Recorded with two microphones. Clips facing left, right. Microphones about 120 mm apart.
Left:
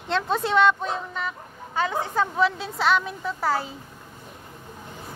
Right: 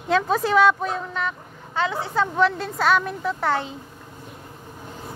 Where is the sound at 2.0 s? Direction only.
45° left (ahead or behind).